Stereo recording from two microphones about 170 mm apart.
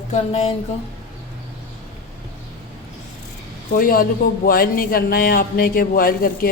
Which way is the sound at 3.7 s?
55° left (ahead or behind).